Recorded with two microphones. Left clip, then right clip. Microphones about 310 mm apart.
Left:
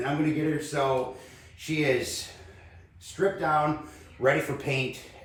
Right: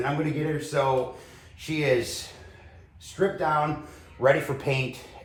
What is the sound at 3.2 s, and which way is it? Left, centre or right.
Speech, centre.